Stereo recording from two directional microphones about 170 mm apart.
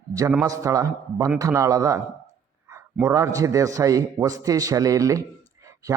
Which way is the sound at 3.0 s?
20° right (ahead or behind).